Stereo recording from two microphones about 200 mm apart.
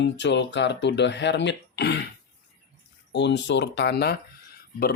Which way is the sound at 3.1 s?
60° left (ahead or behind).